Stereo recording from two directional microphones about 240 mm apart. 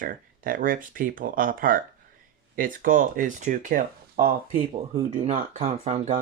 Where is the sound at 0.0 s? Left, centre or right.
Right.